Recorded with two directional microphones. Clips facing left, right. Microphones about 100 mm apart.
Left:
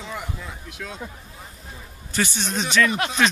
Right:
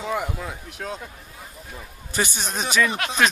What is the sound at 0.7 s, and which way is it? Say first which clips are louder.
Speech: right 2 dB; 35° right (ahead or behind).